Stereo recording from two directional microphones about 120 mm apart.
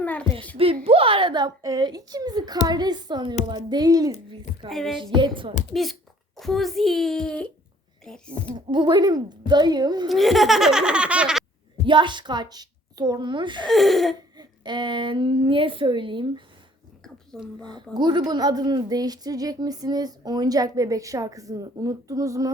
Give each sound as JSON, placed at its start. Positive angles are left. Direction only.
{"t": 0.0, "sound": "a sound", "side_deg": 15}
{"t": 0.5, "sound": "a woman's voice", "side_deg": -50}
{"t": 4.7, "sound": "speech", "side_deg": 0}
{"t": 5.1, "sound": "speech", "side_deg": -45}
{"t": 5.7, "sound": "speech", "side_deg": 0}
{"t": 8.5, "sound": "a woman's voice", "side_deg": -40}
{"t": 10.1, "sound": "speech", "side_deg": 0}
{"t": 11.9, "sound": "a woman's voice", "side_deg": -40}
{"t": 13.7, "sound": "speech", "side_deg": 0}
{"t": 14.3, "sound": "speech", "side_deg": -40}
{"t": 17.3, "sound": "speech", "side_deg": 5}
{"t": 17.9, "sound": "a woman's voice", "side_deg": -40}